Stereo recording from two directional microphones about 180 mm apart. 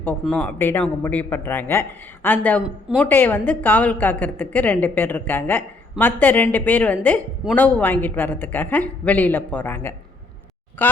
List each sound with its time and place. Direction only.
0.0 s speech: 10° left (ahead or behind)